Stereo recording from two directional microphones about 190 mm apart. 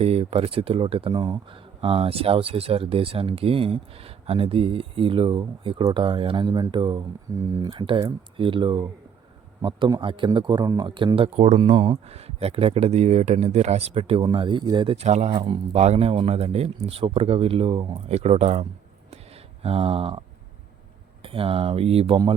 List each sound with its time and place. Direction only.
0.0 s a man's voice: 30° right (ahead or behind)
19.1 s a sound: 30° right (ahead or behind)
21.2 s speech: 30° right (ahead or behind)